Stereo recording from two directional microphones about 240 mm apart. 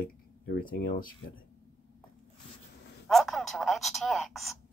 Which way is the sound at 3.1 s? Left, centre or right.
Centre.